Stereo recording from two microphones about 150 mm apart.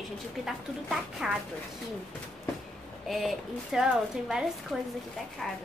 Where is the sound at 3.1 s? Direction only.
Centre (ahead or behind).